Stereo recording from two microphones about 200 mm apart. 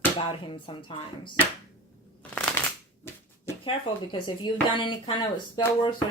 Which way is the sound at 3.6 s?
25° left (ahead or behind).